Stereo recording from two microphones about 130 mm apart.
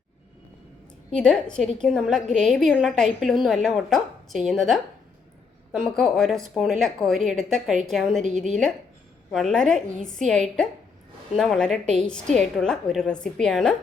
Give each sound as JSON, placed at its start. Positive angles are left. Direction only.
{"t": 1.1, "sound": "a woman's voice", "side_deg": 5}